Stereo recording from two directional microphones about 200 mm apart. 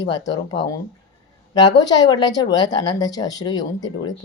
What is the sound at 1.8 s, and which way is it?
Speech, 20° left (ahead or behind).